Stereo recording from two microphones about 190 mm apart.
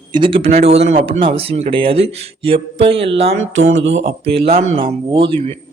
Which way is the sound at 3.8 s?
75° right (ahead or behind).